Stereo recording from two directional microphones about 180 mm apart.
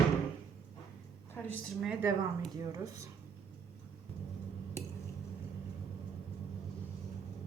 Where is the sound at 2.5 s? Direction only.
15° right (ahead or behind).